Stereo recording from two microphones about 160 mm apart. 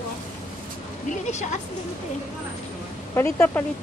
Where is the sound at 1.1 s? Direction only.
50° left (ahead or behind).